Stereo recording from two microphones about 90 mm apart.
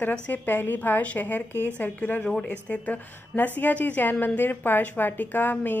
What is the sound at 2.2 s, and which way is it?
A woman's voice, 5° left (ahead or behind).